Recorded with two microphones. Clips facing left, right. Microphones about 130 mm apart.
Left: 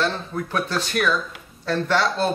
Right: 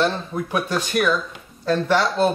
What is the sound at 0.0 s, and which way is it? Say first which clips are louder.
Speech: right 3 dB; 15° right (ahead or behind).